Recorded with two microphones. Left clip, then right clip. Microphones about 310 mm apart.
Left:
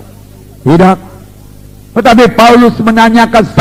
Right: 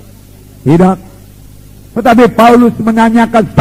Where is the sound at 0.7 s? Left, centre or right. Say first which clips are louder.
Left 3 dB; left.